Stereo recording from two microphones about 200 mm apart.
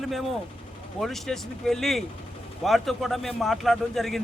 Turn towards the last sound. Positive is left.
turn(degrees=0)  # may be behind; listen again after turning